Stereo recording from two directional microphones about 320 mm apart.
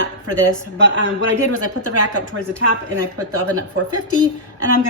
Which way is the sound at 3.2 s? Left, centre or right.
Right.